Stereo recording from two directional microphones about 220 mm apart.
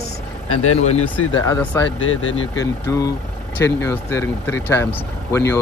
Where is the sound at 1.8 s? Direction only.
60° left (ahead or behind).